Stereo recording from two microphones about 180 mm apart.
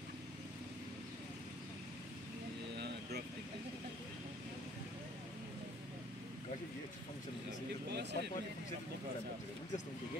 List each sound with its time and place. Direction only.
7.9 s speech: 70° right (ahead or behind)